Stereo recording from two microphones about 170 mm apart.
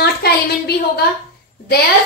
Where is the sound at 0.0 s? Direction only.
70° left (ahead or behind).